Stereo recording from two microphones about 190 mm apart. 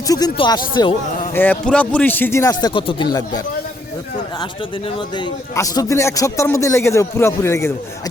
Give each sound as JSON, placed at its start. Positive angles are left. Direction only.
{"t": 0.1, "sound": "speech", "side_deg": 20}
{"t": 1.3, "sound": "a man's voice", "side_deg": 10}
{"t": 4.9, "sound": "a man's voice", "side_deg": 25}